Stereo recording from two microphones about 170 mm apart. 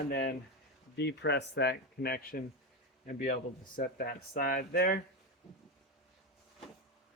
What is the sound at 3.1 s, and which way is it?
A man's voice, 50° left (ahead or behind).